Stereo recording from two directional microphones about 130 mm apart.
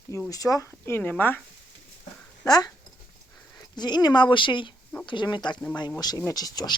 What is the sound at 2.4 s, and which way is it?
Speech, 25° left (ahead or behind).